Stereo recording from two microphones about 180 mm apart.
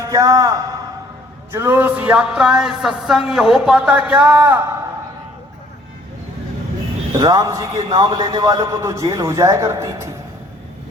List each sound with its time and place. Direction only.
0.0 s a man's voice: 20° right (ahead or behind)
7.2 s a man's voice: 20° right (ahead or behind)